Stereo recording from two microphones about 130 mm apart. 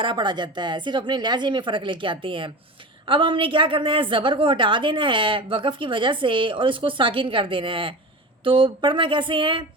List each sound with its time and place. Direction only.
0.0 s a woman's voice: 40° right (ahead or behind)